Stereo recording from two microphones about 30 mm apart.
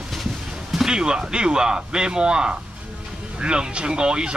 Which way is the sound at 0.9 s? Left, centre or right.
Right.